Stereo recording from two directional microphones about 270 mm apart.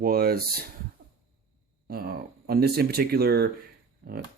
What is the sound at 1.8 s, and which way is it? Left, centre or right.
Speech, right.